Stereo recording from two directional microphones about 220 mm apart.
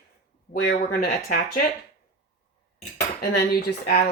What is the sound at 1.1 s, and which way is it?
Speech, 40° left (ahead or behind).